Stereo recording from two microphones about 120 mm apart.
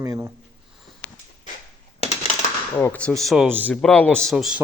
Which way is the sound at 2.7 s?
15° left (ahead or behind).